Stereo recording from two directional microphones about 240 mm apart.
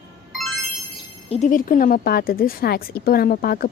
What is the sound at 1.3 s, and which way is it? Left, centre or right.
Speech, left.